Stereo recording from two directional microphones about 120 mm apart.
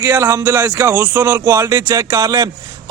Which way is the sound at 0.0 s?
20° right (ahead or behind).